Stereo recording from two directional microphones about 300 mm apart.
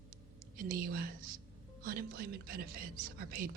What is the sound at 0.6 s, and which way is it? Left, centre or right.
A man's voice, right.